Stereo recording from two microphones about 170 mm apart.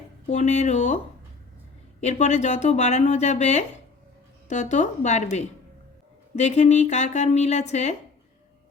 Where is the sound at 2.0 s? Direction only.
45° left (ahead or behind).